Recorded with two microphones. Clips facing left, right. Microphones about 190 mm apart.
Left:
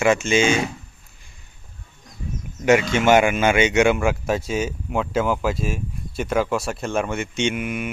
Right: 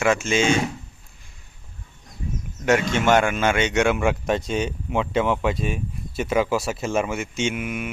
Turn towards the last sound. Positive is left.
turn(degrees=0)  # may be behind; listen again after turning